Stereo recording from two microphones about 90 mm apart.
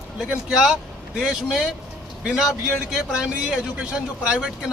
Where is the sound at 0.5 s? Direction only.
5° right (ahead or behind).